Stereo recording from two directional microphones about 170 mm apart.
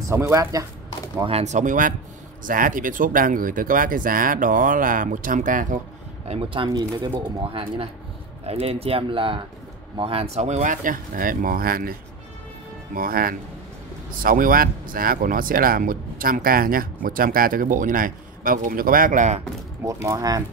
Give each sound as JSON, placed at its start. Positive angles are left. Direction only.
{"t": 0.1, "sound": "speech", "side_deg": -15}
{"t": 1.2, "sound": "speech", "side_deg": -40}
{"t": 6.2, "sound": "speech", "side_deg": -35}
{"t": 12.9, "sound": "speech", "side_deg": -60}
{"t": 19.8, "sound": "speech", "side_deg": -20}